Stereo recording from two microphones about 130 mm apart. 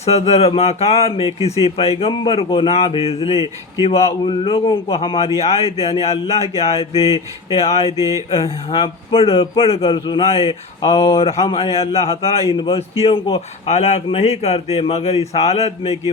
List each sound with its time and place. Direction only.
0.0 s speech: 55° left (ahead or behind)
2.6 s speech: 50° left (ahead or behind)
7.9 s mantra: 25° right (ahead or behind)
8.3 s speech: 50° left (ahead or behind)